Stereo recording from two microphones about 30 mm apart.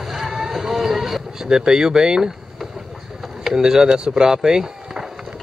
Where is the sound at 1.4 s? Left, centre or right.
Right.